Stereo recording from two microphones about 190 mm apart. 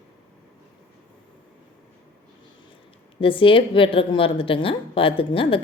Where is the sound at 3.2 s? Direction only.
30° left (ahead or behind).